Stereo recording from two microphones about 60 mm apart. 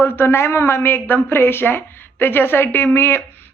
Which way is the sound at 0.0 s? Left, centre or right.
Left.